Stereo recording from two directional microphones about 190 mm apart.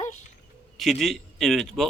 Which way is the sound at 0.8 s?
Centre (ahead or behind).